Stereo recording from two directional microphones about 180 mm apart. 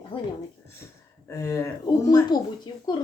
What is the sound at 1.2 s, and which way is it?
Speech, 15° left (ahead or behind).